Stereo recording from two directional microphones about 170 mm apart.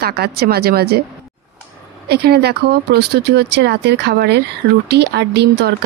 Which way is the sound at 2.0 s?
70° right (ahead or behind).